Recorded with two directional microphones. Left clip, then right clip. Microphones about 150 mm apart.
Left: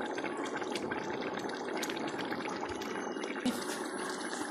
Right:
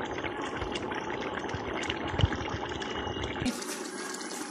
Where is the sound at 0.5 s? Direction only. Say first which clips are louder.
Right 2 dB; 20° left (ahead or behind).